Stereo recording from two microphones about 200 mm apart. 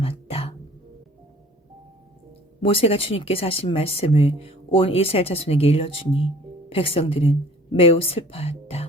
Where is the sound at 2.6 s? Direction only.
30° left (ahead or behind).